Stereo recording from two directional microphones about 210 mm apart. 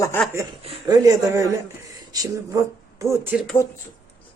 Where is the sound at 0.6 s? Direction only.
20° right (ahead or behind).